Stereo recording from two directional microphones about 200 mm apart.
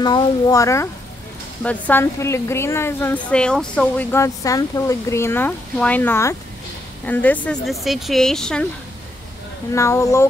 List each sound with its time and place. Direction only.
0.0 s a woman's voice: 20° left (ahead or behind); by 8.6 s 5° left (ahead or behind)
9.7 s a woman's voice: 15° left (ahead or behind)